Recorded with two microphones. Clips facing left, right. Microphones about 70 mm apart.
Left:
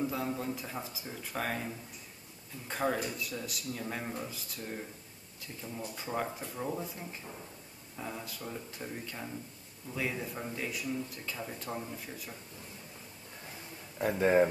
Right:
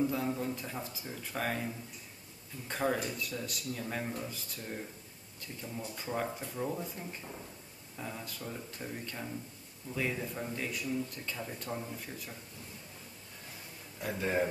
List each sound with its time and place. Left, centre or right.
0.0 s speech: centre
2.7 s speech: centre
5.9 s speech: centre
13.9 s a man's voice: left